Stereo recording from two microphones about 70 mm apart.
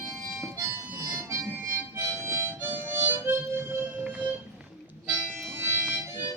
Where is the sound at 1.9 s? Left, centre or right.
Right.